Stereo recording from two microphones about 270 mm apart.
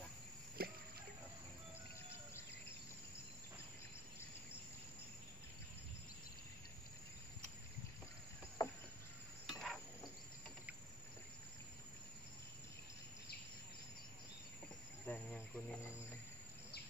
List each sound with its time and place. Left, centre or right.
0.6 s music: right
8.6 s rowboat: centre
9.5 s stir: centre
15.0 s insect: centre